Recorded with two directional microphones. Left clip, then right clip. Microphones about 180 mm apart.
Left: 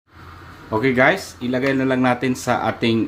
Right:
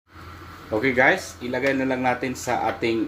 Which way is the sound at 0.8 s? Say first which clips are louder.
Left 2 dB; 45° left (ahead or behind).